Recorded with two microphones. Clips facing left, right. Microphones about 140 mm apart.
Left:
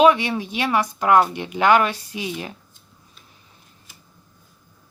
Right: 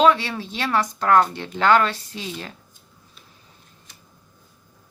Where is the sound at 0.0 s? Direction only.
15° left (ahead or behind).